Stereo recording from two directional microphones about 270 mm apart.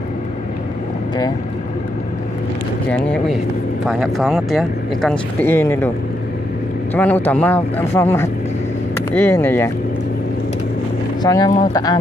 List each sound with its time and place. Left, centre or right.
2.9 s speech: centre
6.9 s speech: centre
11.2 s speech: centre